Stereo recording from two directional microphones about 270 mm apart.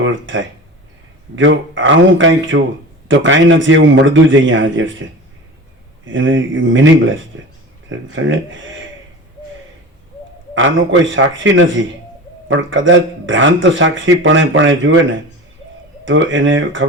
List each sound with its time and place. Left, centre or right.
0.0 s a man's voice: right
6.1 s a man's voice: right
10.5 s a man's voice: right
16.0 s a man's voice: right